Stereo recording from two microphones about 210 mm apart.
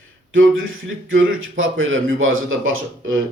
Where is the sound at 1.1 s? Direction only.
65° right (ahead or behind).